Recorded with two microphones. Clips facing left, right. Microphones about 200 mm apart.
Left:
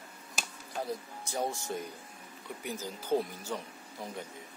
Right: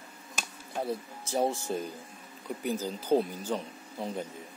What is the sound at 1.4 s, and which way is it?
Speech, 30° right (ahead or behind).